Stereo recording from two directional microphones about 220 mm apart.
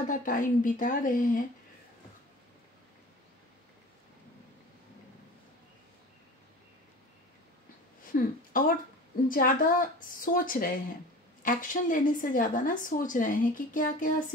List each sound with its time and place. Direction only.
0.1 s a woman's voice: 40° left (ahead or behind)
8.1 s a woman's voice: 40° left (ahead or behind)